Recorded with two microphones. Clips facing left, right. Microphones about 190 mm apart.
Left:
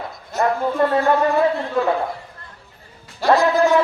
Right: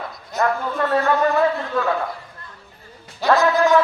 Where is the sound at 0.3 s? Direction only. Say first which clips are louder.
Left 3 dB; 25° left (ahead or behind).